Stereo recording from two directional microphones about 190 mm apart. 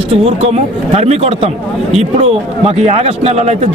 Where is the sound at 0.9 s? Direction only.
35° right (ahead or behind).